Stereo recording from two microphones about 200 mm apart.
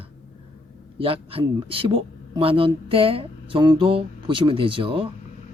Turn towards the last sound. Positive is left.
turn(degrees=-25)  # may be behind; listen again after turning